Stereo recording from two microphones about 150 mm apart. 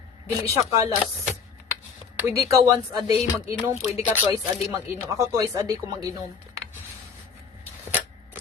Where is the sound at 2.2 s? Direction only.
20° right (ahead or behind).